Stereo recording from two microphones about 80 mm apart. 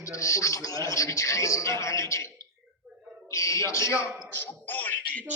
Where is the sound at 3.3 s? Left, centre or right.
Left.